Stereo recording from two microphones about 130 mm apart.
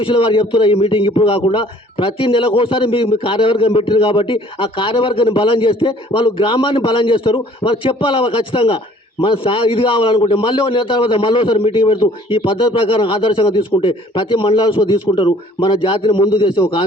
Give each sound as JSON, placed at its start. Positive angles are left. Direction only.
{"t": 0.0, "sound": "a man's voice", "side_deg": 40}